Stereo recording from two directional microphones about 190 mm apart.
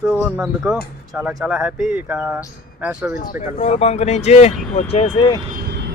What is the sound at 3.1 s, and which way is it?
Speech, 50° left (ahead or behind).